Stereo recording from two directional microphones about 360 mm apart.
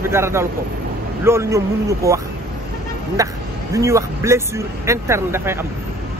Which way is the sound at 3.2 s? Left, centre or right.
Centre.